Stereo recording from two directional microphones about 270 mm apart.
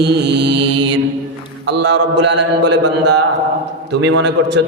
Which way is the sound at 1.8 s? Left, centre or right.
Right.